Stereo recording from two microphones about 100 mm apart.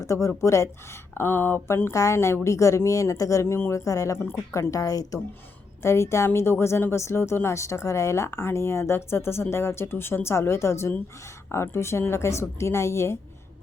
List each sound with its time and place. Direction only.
0.0 s a woman's voice: 30° left (ahead or behind)